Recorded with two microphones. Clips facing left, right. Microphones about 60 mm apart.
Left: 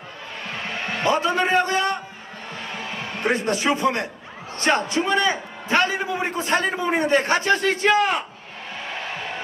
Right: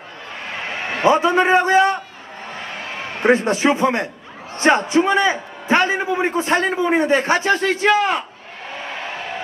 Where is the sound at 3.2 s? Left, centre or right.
Right.